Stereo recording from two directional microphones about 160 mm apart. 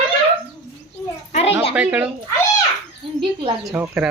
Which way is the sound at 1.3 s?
40° left (ahead or behind).